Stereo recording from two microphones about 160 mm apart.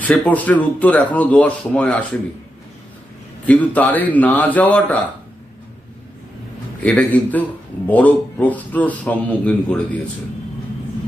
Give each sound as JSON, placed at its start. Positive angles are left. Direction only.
{"t": 0.0, "sound": "speech", "side_deg": 10}
{"t": 3.4, "sound": "speech", "side_deg": 10}
{"t": 6.8, "sound": "speech", "side_deg": 10}